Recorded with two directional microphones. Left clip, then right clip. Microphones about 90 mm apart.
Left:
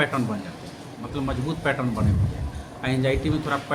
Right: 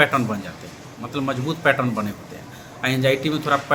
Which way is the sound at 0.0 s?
20° right (ahead or behind).